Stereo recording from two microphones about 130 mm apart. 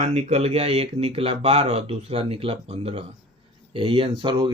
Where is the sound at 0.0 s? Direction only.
60° right (ahead or behind).